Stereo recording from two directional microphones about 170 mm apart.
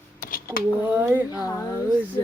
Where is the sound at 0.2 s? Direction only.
55° left (ahead or behind).